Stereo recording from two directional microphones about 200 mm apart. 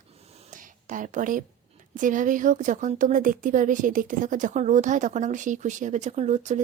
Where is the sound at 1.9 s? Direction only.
40° right (ahead or behind).